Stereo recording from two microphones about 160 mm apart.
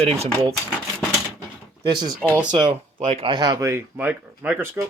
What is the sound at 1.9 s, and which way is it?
Speech, 25° right (ahead or behind).